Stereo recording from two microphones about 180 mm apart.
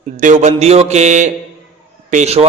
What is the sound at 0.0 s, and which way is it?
A man's voice, 45° right (ahead or behind).